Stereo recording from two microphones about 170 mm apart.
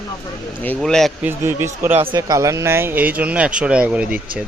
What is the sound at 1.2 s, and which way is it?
Speech, 15° right (ahead or behind).